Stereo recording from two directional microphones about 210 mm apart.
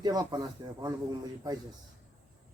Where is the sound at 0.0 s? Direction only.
20° right (ahead or behind).